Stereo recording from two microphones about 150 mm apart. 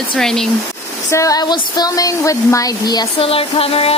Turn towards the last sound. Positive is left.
turn(degrees=40)  # may be behind; listen again after turning